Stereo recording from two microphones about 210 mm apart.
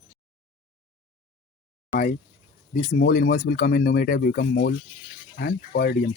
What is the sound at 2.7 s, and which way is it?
Speech, 50° left (ahead or behind).